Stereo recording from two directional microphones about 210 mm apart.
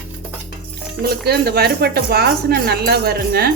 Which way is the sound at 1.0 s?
50° right (ahead or behind).